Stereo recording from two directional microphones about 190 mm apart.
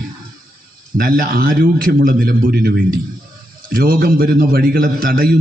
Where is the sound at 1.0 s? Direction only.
50° right (ahead or behind).